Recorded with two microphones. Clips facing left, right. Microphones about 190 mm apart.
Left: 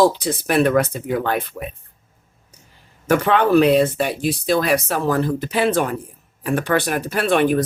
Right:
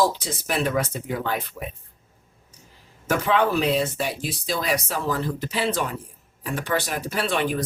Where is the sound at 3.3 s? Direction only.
60° left (ahead or behind).